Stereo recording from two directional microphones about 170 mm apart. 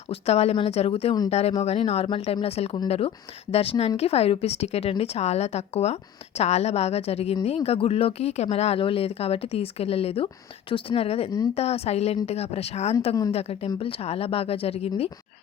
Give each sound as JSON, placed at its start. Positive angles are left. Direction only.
{"t": 0.1, "sound": "speech", "side_deg": 35}